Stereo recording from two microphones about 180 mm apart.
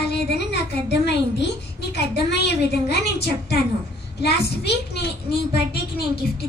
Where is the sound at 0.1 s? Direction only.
70° left (ahead or behind).